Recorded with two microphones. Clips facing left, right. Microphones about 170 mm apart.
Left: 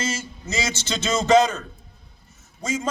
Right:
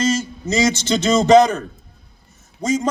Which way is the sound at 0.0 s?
15° right (ahead or behind).